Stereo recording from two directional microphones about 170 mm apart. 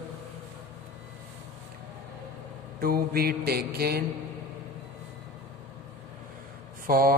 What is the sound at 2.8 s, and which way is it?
Mantra, 60° right (ahead or behind).